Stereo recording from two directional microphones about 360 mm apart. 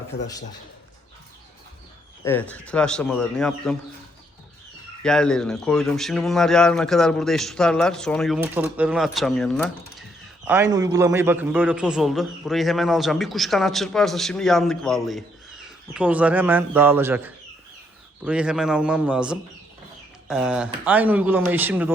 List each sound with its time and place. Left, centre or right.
0.1 s a man's voice: left
2.2 s a man's voice: centre
5.0 s a man's voice: centre